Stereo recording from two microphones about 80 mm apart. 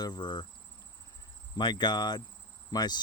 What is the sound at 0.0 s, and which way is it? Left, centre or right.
Speech, left.